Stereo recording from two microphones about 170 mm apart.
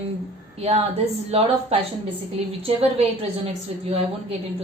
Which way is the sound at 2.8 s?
35° right (ahead or behind).